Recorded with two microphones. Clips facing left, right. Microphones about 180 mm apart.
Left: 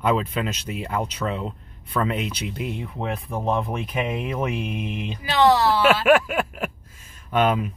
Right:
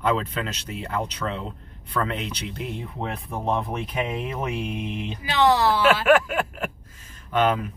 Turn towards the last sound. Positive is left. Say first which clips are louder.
# left 1 dB
turn(degrees=10)  # may be behind; listen again after turning